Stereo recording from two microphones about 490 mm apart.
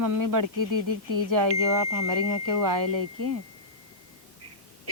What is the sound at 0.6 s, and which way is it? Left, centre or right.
Speech, right.